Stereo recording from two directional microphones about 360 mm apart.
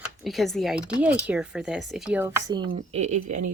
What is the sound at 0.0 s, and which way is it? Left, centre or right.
Speech, centre.